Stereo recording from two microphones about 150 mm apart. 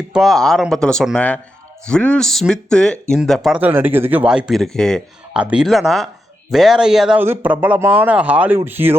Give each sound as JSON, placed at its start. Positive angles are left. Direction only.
{"t": 0.1, "sound": "a man's voice", "side_deg": 0}
{"t": 3.6, "sound": "a man's voice", "side_deg": -15}